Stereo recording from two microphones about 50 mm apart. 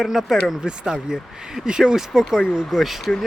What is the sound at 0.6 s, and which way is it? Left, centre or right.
Speech, centre.